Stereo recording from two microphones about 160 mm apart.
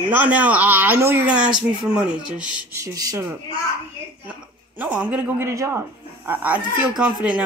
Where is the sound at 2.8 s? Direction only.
20° right (ahead or behind).